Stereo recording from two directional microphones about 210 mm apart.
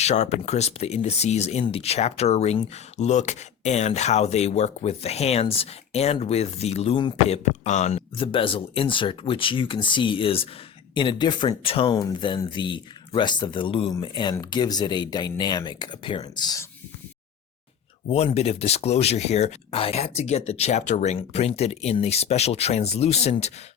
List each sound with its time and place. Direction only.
0.0 s speech: 30° left (ahead or behind)
18.1 s speech: 30° left (ahead or behind)